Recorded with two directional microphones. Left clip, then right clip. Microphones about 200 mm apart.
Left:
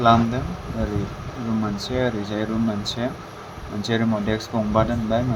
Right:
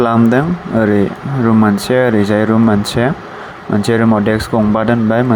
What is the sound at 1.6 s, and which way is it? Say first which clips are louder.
Speech: right 10 dB; 40° right (ahead or behind).